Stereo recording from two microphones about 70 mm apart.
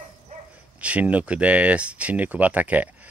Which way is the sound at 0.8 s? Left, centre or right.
Centre.